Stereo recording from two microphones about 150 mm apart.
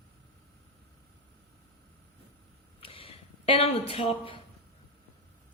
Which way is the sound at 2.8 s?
35° left (ahead or behind).